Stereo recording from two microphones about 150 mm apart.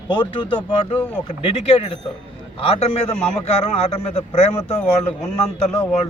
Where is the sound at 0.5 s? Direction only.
35° left (ahead or behind).